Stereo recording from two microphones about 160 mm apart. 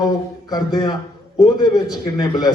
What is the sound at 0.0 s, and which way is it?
A man's voice, 25° left (ahead or behind).